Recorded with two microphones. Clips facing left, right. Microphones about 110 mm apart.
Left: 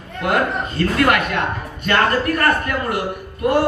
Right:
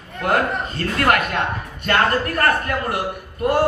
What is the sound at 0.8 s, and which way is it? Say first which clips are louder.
A man's voice: left 2 dB; 40° right (ahead or behind).